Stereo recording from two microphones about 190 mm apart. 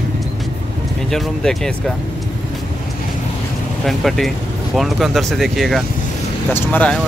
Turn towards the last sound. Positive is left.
turn(degrees=10)  # may be behind; listen again after turning